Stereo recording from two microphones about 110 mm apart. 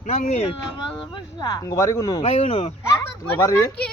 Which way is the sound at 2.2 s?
85° left.